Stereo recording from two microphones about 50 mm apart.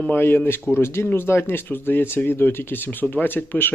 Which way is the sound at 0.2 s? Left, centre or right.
Left.